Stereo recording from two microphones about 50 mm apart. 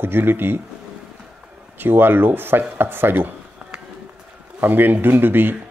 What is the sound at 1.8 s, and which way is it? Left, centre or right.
Speech, right.